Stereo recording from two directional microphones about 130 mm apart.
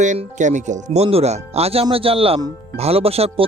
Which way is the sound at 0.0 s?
70° right (ahead or behind).